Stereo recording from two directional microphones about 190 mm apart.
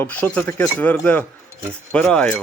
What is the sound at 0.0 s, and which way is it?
Speech, 10° left (ahead or behind).